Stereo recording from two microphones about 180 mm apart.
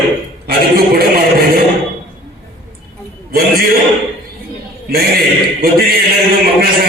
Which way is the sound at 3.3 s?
55° right (ahead or behind).